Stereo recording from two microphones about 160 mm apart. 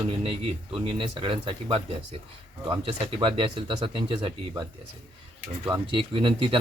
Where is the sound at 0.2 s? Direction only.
35° right (ahead or behind).